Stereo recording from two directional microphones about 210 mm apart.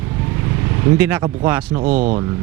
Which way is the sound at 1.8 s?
30° right (ahead or behind).